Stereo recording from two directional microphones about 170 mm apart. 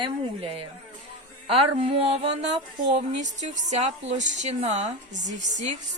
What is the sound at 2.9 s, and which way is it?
A woman's voice, 45° right (ahead or behind).